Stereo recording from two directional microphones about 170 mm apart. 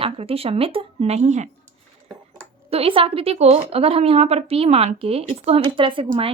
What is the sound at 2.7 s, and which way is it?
A woman's voice, 35° right (ahead or behind).